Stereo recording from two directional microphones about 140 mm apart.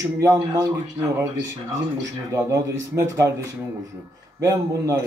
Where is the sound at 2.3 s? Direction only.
20° right (ahead or behind).